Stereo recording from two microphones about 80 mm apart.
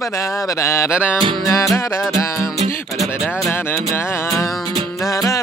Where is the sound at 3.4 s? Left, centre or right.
Left.